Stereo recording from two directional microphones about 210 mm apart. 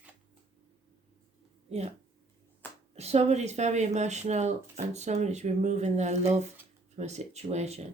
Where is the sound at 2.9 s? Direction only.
30° right (ahead or behind).